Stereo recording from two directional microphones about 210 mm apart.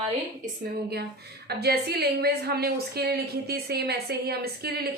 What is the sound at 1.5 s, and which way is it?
A woman's voice, 50° right (ahead or behind).